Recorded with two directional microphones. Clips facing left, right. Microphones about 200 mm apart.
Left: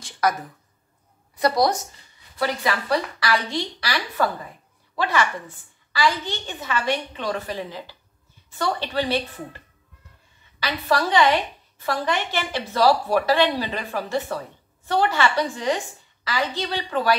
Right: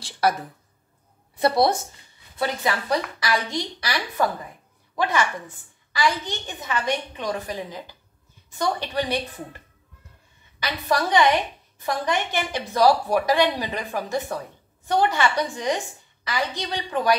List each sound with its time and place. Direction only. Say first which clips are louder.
0.0 s a sound: right 1 dB; 30° right (ahead or behind)
1.3 s a woman's voice: right 1 dB; 25° right (ahead or behind)
10.6 s a woman's voice: left 1 dB; 15° right (ahead or behind)